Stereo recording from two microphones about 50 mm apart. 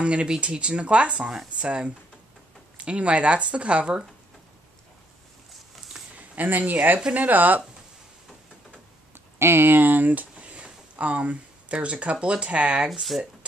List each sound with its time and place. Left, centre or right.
0.0 s speech: right
6.1 s speech: right
9.4 s speech: right
10.3 s speech: right